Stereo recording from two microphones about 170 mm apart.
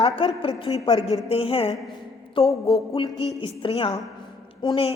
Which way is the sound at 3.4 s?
30° left (ahead or behind).